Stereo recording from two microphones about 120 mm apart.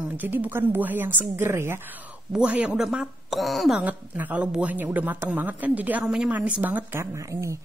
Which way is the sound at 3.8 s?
15° right (ahead or behind).